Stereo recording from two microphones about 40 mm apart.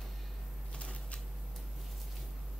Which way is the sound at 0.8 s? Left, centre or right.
Left.